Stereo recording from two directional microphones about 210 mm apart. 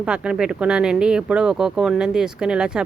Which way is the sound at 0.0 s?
5° right (ahead or behind).